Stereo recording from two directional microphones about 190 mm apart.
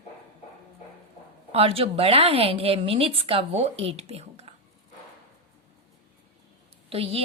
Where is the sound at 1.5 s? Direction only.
30° right (ahead or behind).